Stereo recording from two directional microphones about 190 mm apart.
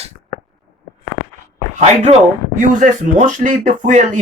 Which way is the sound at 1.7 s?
35° right (ahead or behind).